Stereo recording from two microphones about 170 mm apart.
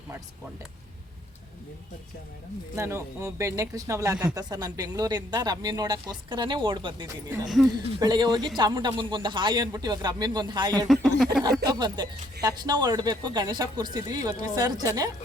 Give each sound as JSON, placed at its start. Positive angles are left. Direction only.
{"t": 2.7, "sound": "speech", "side_deg": -15}
{"t": 7.4, "sound": "speech", "side_deg": 0}
{"t": 7.9, "sound": "speech", "side_deg": -25}
{"t": 10.8, "sound": "speech", "side_deg": 0}
{"t": 11.6, "sound": "speech", "side_deg": -25}